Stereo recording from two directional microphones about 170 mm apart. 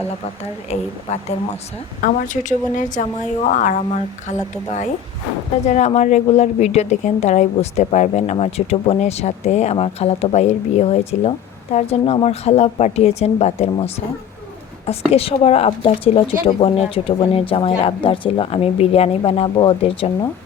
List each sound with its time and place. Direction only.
0.7 s a woman's voice: 40° left (ahead or behind)